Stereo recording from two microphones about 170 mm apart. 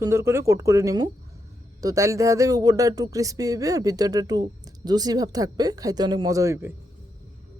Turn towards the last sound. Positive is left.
turn(degrees=-15)  # may be behind; listen again after turning